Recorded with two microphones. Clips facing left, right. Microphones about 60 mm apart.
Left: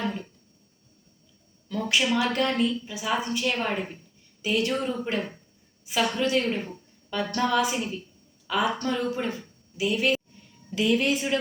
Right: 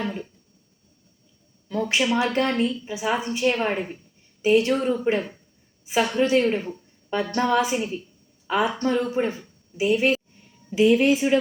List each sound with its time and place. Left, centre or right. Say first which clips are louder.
0.0 s music: right 1 dB; centre
1.7 s a woman's voice: right 2 dB; right